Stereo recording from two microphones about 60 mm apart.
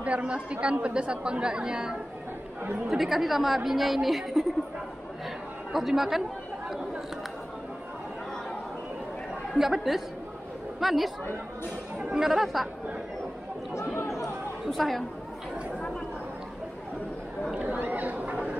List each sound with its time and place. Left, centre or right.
0.0 s a woman's voice: centre
5.7 s a woman's voice: centre
9.5 s a woman's voice: centre
12.0 s speech: centre
12.3 s a woman's voice: centre
13.9 s chatter: left
14.2 s chatter: centre
17.6 s a sound: right